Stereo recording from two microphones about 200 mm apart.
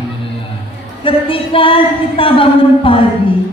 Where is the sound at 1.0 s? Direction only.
25° left (ahead or behind).